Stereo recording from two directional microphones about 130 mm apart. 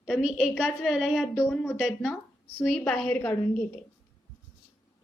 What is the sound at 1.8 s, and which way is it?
A woman's voice, 5° right (ahead or behind).